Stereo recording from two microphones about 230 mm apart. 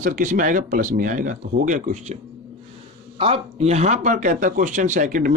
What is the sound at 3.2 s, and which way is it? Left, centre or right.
Speech, right.